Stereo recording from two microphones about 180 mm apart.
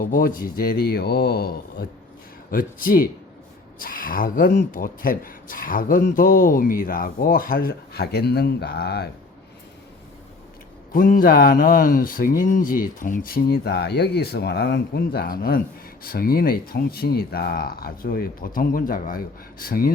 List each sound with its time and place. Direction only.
0.0 s speech: 50° left (ahead or behind)
10.9 s speech: 50° left (ahead or behind)